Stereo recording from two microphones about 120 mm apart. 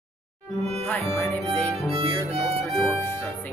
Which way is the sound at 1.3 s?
15° left (ahead or behind).